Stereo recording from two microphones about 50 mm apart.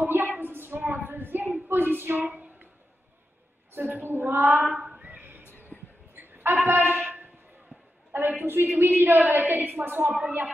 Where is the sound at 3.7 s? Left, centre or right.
Right.